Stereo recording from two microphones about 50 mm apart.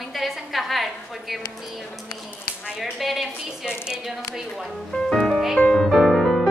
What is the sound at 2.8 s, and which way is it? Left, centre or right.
Speech, centre.